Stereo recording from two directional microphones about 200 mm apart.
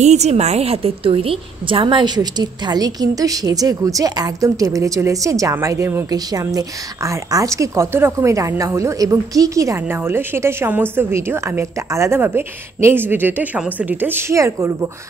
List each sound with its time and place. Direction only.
0.0 s a woman's voice: 35° right (ahead or behind); by 14.9 s 15° right (ahead or behind)